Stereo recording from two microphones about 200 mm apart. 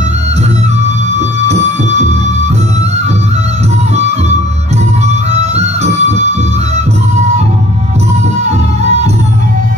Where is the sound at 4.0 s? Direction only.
35° right (ahead or behind).